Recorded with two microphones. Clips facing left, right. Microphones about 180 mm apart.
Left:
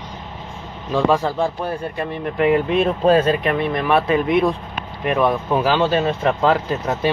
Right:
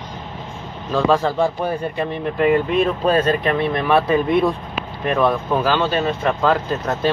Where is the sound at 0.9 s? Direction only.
10° left (ahead or behind).